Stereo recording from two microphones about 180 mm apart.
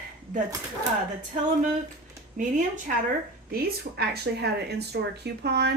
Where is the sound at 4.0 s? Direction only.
65° right (ahead or behind).